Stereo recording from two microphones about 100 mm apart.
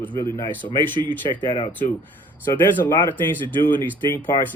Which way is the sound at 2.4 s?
20° left (ahead or behind).